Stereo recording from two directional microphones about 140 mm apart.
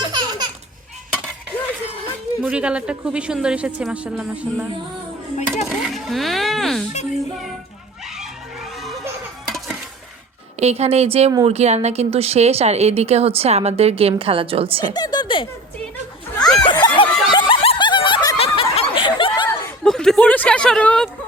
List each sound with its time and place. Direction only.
0.1 s baby laughter: 30° right (ahead or behind)
1.5 s music: 10° left (ahead or behind)
2.4 s speech: 10° right (ahead or behind)
5.6 s speech: centre (ahead or behind)
8.0 s a sound: 5° right (ahead or behind)
9.5 s stir: centre (ahead or behind)
10.6 s speech: 50° right (ahead or behind)
14.9 s speech: 30° left (ahead or behind)
16.4 s a sound: 5° left (ahead or behind)
16.6 s snicker: 35° left (ahead or behind)
18.3 s snicker: 40° left (ahead or behind)
19.8 s a sound: 5° left (ahead or behind)